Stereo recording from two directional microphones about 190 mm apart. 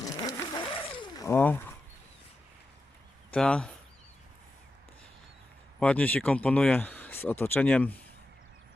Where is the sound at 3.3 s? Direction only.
5° left (ahead or behind).